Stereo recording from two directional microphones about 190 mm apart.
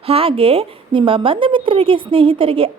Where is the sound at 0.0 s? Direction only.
30° right (ahead or behind).